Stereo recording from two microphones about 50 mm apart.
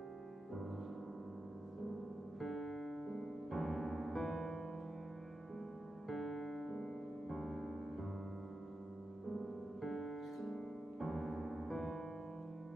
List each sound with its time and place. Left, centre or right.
2.4 s piano: centre
6.0 s music: centre
9.3 s music: centre